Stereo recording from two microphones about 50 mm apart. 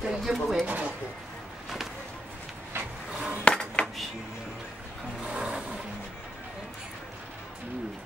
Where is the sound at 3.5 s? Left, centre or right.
Left.